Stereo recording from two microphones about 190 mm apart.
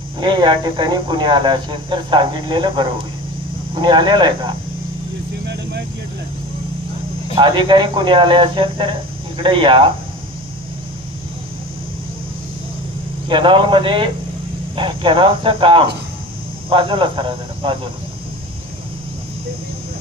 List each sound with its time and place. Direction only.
0.2 s speech: 25° right (ahead or behind)
7.3 s speech: 25° right (ahead or behind)
13.2 s speech: 25° right (ahead or behind)